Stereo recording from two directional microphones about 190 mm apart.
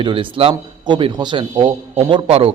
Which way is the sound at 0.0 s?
25° right (ahead or behind).